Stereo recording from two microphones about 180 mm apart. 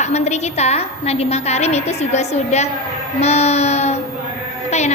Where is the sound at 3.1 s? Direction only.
35° left (ahead or behind).